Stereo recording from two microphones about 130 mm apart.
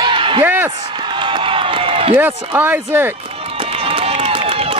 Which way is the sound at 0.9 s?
40° right (ahead or behind).